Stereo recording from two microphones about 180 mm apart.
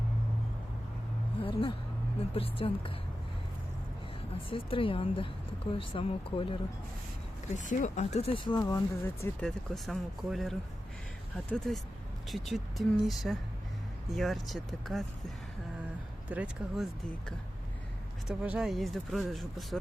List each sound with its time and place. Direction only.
1.4 s a sound: 30° left (ahead or behind)
2.3 s speech: 30° left (ahead or behind)
4.4 s speech: 30° left (ahead or behind)
7.5 s speech: 45° left (ahead or behind); by 9.5 s 15° left (ahead or behind)
9.5 s speech: centre (ahead or behind)
16.3 s speech: 5° right (ahead or behind)